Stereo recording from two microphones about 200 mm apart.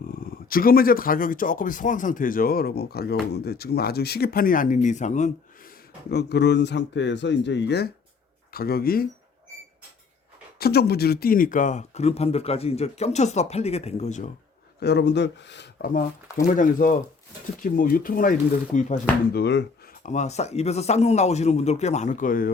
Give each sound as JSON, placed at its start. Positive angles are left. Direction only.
{"t": 0.1, "sound": "speech", "side_deg": 45}
{"t": 6.1, "sound": "speech", "side_deg": 55}
{"t": 10.6, "sound": "speech", "side_deg": 50}
{"t": 14.8, "sound": "speech", "side_deg": 55}
{"t": 16.5, "sound": "speech", "side_deg": 40}
{"t": 19.3, "sound": "speech", "side_deg": 60}